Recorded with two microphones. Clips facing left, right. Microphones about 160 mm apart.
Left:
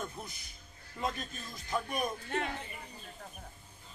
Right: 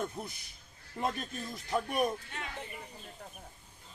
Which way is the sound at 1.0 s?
45° right (ahead or behind).